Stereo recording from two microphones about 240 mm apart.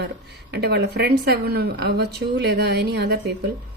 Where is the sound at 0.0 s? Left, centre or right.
Right.